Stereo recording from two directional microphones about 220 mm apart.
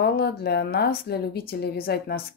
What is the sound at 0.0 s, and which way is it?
Speech, 45° left (ahead or behind).